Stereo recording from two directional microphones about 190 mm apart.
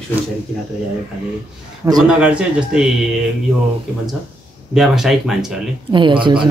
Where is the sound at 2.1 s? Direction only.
5° right (ahead or behind).